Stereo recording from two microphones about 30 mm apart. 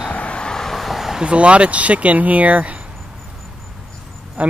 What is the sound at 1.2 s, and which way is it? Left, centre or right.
Speech, right.